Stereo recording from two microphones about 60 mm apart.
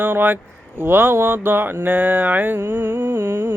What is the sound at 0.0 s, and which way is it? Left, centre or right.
Mantra, right.